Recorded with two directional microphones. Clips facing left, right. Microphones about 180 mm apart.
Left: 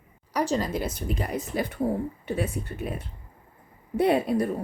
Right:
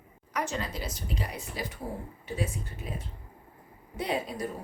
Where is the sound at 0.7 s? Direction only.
55° left (ahead or behind).